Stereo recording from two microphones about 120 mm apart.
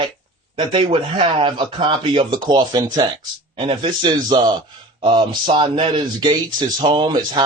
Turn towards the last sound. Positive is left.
turn(degrees=-40)  # may be behind; listen again after turning